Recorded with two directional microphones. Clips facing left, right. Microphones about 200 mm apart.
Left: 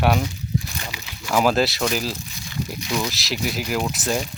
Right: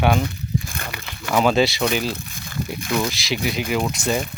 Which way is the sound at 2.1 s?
50° right (ahead or behind).